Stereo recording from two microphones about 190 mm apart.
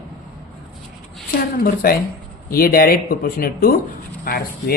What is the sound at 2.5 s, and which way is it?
Speech, 50° left (ahead or behind).